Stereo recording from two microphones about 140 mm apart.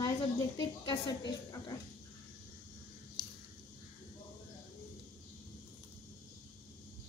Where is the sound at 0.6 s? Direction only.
30° left (ahead or behind).